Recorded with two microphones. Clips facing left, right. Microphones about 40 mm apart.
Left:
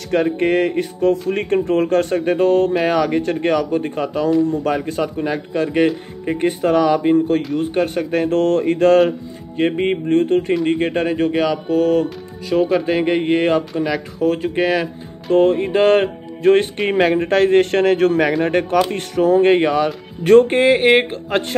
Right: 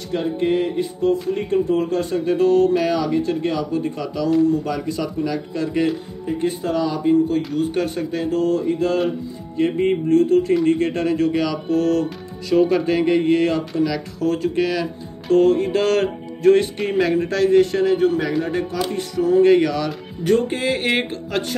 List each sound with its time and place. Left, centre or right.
0.1 s speech: left
2.3 s speech: left
2.8 s speech: left
6.2 s speech: left
9.6 s speech: left
10.6 s speech: left
12.5 s speech: centre
12.8 s speech: left
18.4 s speech: left
20.2 s speech: left
20.8 s speech: centre
21.3 s speech: left